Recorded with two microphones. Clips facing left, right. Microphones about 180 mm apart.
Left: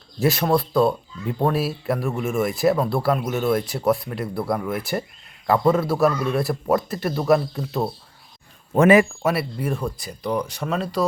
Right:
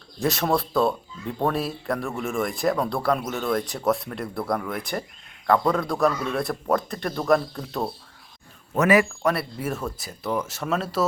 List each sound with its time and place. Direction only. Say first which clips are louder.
0.2 s speech: left 3 dB; centre (ahead or behind)
8.7 s speech: left 5 dB; 30° left (ahead or behind)
9.2 s speech: left 2 dB; centre (ahead or behind)